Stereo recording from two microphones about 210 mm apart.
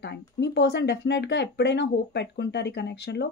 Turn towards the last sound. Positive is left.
turn(degrees=55)  # may be behind; listen again after turning